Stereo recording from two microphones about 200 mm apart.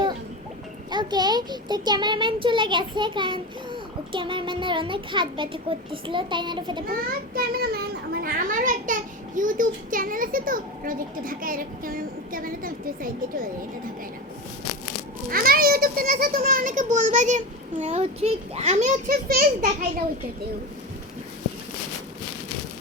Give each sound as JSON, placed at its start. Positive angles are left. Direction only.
{"t": 0.9, "sound": "a child's voice", "side_deg": -20}
{"t": 7.3, "sound": "a child's voice", "side_deg": -50}
{"t": 15.3, "sound": "a child's voice", "side_deg": -45}